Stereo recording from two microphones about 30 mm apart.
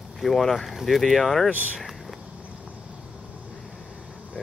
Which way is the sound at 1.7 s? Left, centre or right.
Centre.